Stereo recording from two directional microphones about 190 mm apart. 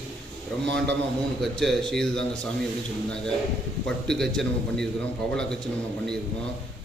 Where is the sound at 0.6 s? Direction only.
65° right (ahead or behind).